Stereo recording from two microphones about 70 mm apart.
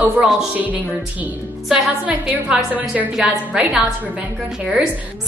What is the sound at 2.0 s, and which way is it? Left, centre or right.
Speech, right.